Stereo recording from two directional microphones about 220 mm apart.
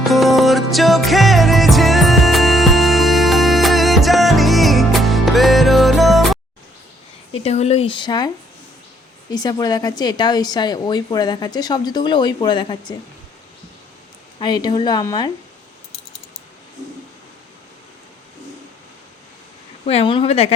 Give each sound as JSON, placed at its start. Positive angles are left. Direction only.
{"t": 0.0, "sound": "music", "side_deg": 0}
{"t": 7.4, "sound": "a woman's voice", "side_deg": 30}
{"t": 9.3, "sound": "a woman's voice", "side_deg": 15}
{"t": 14.3, "sound": "a woman's voice", "side_deg": 20}
{"t": 19.8, "sound": "a woman's voice", "side_deg": 30}